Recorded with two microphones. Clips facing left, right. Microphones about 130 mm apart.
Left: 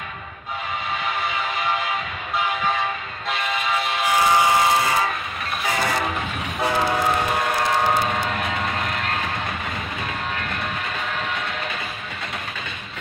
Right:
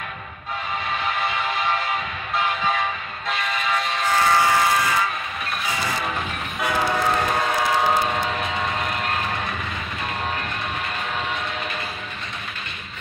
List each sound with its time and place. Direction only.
3.3 s train: 5° left (ahead or behind); by 4.8 s 20° left (ahead or behind)